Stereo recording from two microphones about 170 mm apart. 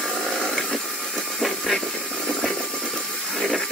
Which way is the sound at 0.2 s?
Centre (ahead or behind).